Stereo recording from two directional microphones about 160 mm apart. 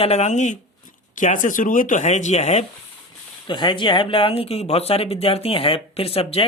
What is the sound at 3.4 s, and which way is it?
Speech, 30° left (ahead or behind).